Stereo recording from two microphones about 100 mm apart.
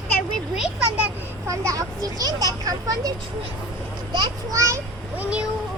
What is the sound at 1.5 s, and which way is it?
A child's voice, 30° right (ahead or behind).